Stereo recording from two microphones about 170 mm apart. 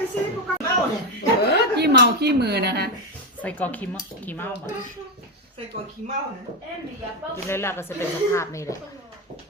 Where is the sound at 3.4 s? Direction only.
10° left (ahead or behind).